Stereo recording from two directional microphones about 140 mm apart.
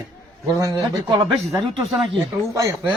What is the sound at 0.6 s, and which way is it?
Speech, 35° right (ahead or behind).